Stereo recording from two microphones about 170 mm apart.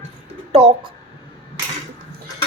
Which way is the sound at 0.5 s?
35° right (ahead or behind).